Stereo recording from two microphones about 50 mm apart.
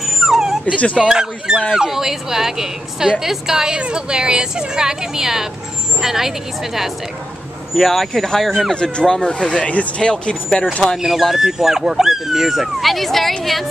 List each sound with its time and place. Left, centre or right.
0.0 s dog: centre
0.7 s speech: left
1.0 s a woman's voice: centre
7.7 s speech: centre
8.7 s speech: centre
11.0 s speech: centre